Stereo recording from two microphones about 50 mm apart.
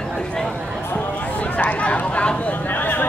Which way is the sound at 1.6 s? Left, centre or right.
Left.